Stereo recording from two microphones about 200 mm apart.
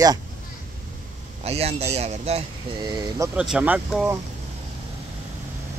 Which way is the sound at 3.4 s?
5° right (ahead or behind).